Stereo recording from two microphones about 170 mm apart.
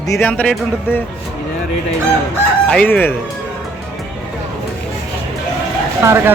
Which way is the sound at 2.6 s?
10° left (ahead or behind).